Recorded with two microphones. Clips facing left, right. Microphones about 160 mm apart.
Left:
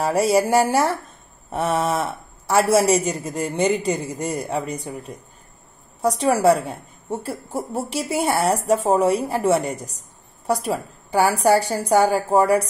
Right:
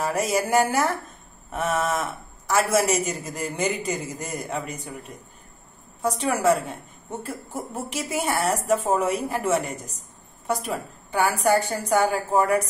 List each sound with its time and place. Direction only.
0.0 s a woman's voice: 30° left (ahead or behind)